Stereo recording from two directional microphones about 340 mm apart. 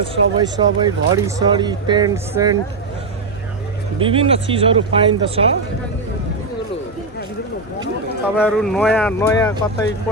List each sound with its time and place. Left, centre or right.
0.0 s speech: centre
3.9 s speech: centre
8.4 s speech: centre